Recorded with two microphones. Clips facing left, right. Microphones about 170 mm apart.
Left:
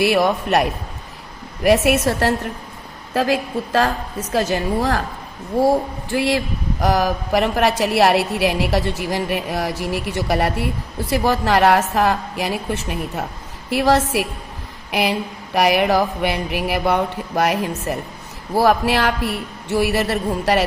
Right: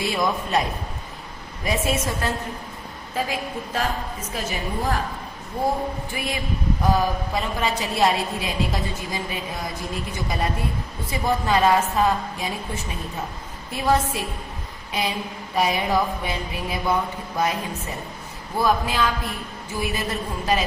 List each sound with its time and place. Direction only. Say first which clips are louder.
0.0 s speech: left 7 dB; 70° left (ahead or behind)
3.1 s a woman's voice: left 8 dB; 85° left
15.5 s speech: left 6 dB; 75° left (ahead or behind)